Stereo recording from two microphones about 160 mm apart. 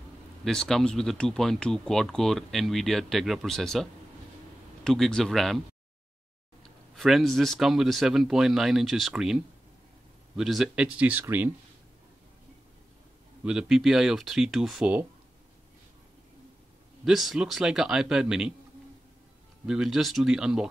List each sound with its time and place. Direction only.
0.5 s speech: centre (ahead or behind)
6.6 s speech: centre (ahead or behind)
13.4 s speech: 5° right (ahead or behind)
17.0 s speech: centre (ahead or behind)
19.6 s speech: 5° right (ahead or behind)